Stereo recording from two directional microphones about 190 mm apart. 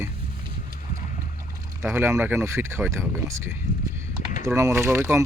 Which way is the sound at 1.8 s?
10° right (ahead or behind).